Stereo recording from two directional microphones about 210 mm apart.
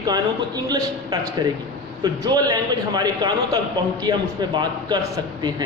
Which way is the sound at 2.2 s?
20° right (ahead or behind).